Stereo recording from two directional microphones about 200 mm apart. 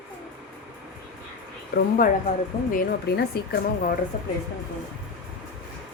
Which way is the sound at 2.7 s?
50° left (ahead or behind).